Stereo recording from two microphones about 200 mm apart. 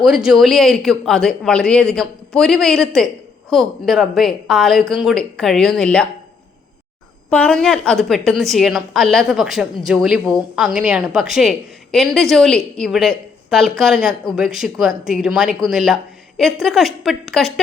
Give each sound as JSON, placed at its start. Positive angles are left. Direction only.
{"t": 0.0, "sound": "speech", "side_deg": 0}
{"t": 7.3, "sound": "speech", "side_deg": 5}